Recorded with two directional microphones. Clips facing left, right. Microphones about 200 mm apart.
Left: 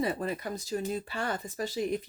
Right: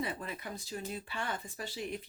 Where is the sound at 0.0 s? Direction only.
40° left (ahead or behind).